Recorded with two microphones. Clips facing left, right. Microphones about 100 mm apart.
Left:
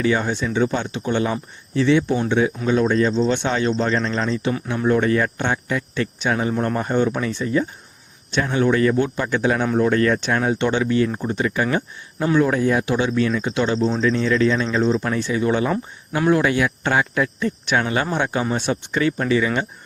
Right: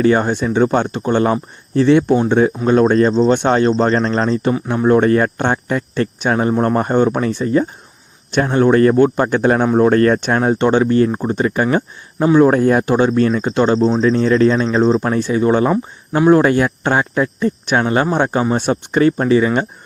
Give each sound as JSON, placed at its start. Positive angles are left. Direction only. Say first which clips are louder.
{"t": 0.0, "sound": "speech", "louder": "right 6 dB", "side_deg": -45}
{"t": 12.5, "sound": "speech", "louder": "right 6 dB", "side_deg": -50}